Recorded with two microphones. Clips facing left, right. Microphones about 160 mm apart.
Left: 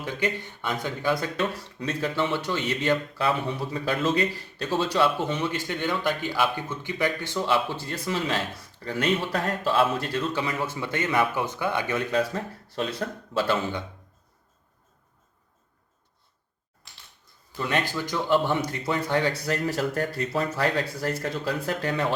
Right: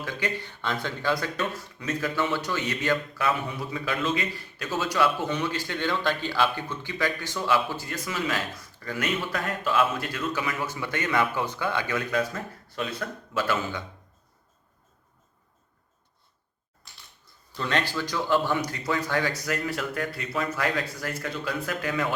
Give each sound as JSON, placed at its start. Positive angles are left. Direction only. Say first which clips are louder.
{"t": 0.0, "sound": "a man's voice", "louder": "left 3 dB", "side_deg": 20}
{"t": 17.6, "sound": "a man's voice", "louder": "left 1 dB", "side_deg": 15}